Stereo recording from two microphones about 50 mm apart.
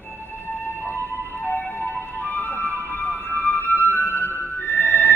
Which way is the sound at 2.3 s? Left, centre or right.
Left.